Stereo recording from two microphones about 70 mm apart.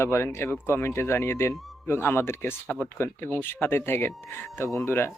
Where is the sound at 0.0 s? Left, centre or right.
Left.